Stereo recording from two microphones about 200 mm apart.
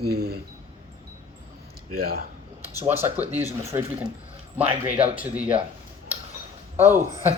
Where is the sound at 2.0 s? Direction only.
50° right (ahead or behind).